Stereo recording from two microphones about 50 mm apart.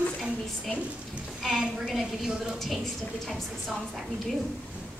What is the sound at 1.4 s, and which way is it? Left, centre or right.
Speech, centre.